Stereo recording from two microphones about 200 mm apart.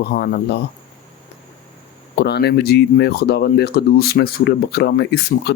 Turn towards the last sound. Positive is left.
turn(degrees=55)  # may be behind; listen again after turning